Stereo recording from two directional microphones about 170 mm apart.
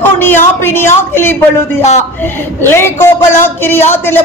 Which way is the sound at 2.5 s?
15° left (ahead or behind).